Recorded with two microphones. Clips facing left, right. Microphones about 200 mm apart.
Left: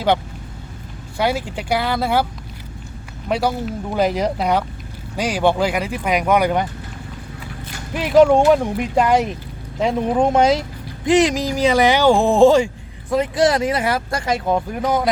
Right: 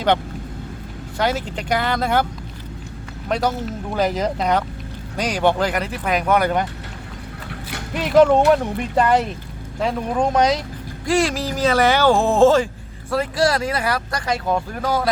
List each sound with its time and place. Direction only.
1.2 s speech: 10° left (ahead or behind)
3.2 s speech: 10° left (ahead or behind)
7.9 s speech: 10° left (ahead or behind)